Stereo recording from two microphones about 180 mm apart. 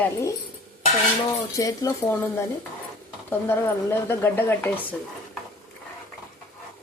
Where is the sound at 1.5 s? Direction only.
20° left (ahead or behind).